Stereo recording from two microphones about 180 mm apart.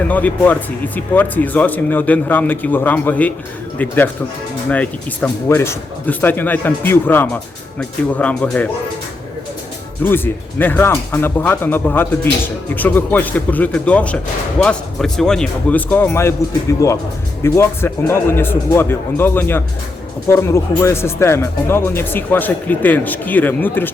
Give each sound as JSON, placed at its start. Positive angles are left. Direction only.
{"t": 0.1, "sound": "speech", "side_deg": 10}
{"t": 10.0, "sound": "speech", "side_deg": 10}